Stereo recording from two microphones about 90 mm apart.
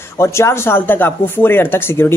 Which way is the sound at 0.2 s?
30° left (ahead or behind).